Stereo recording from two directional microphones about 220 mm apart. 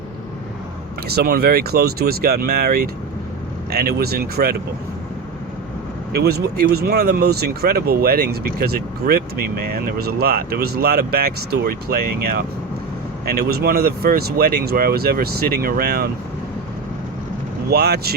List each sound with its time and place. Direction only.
1.0 s speech: 45° right (ahead or behind)
6.1 s speech: 45° right (ahead or behind)
17.7 s speech: 45° right (ahead or behind)